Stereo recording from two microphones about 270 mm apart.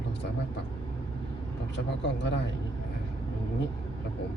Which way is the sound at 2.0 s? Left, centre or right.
Left.